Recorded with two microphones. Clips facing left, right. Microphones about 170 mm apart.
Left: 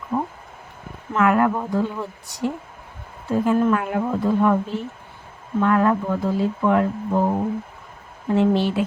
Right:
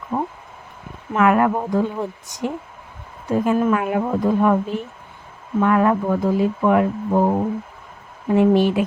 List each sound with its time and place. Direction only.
0.1 s speech: 35° right (ahead or behind)
1.1 s speech: 20° right (ahead or behind)